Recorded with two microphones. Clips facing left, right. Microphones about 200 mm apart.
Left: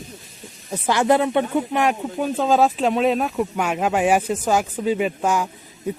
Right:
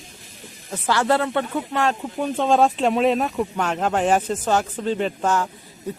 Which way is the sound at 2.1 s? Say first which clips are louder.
Right 1 dB; 5° left (ahead or behind).